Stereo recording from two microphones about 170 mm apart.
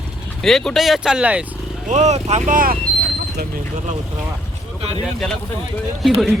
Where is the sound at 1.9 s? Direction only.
40° right (ahead or behind).